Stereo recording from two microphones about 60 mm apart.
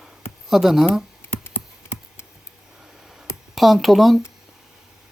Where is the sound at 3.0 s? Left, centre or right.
Centre.